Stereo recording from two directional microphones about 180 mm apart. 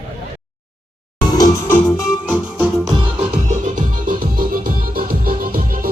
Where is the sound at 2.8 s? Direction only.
25° right (ahead or behind).